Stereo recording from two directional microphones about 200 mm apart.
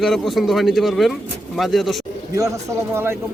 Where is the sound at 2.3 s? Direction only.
15° right (ahead or behind).